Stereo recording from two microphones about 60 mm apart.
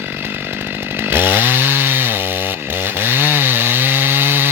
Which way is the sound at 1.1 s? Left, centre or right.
Right.